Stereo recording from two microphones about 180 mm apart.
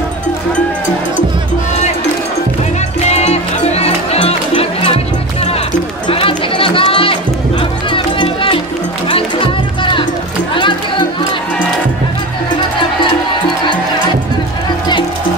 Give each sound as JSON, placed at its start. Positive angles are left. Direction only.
{"t": 3.1, "sound": "music", "side_deg": 35}
{"t": 6.0, "sound": "music", "side_deg": 30}
{"t": 10.5, "sound": "music", "side_deg": 25}